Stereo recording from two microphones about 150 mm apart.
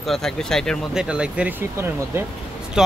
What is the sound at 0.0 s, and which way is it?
A man's voice, centre (ahead or behind).